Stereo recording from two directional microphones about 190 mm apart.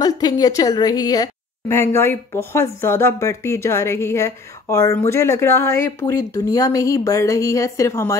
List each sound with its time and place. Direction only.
0.0 s a woman's voice: 20° left (ahead or behind)